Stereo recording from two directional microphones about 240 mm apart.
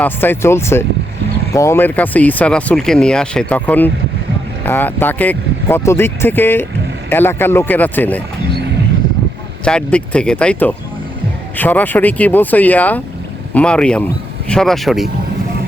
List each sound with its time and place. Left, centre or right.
0.0 s speech: centre
9.6 s speech: centre